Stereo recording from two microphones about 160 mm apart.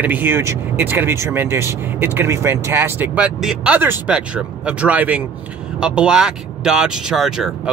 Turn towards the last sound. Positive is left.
turn(degrees=-5)  # may be behind; listen again after turning